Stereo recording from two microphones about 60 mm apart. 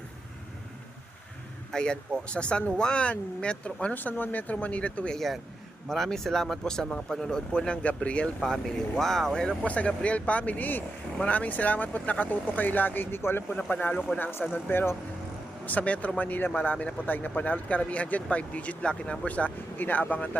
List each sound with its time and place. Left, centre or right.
1.7 s speech: centre
5.1 s speech: centre
8.4 s speech: centre
9.6 s speech: left
15.6 s speech: left